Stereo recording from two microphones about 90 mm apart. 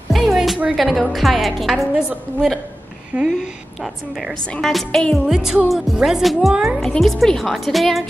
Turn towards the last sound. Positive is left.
turn(degrees=0)  # may be behind; listen again after turning